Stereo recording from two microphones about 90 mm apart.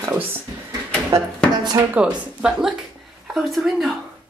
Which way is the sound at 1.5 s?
55° right (ahead or behind).